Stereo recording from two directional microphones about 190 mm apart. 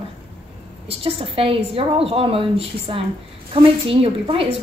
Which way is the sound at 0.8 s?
30° right (ahead or behind).